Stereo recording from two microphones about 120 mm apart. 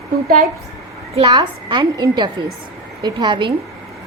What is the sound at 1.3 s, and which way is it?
A woman's voice, 40° right (ahead or behind).